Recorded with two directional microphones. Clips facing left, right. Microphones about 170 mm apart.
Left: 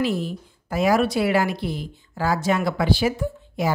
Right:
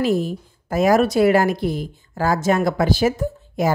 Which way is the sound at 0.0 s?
45° right (ahead or behind).